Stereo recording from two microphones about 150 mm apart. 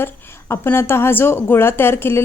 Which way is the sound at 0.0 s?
15° left (ahead or behind).